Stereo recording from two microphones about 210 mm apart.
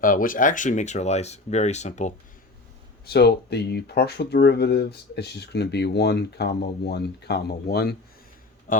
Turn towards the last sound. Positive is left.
turn(degrees=50)  # may be behind; listen again after turning